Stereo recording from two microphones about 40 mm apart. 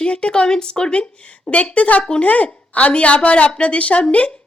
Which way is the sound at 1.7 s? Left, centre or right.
Left.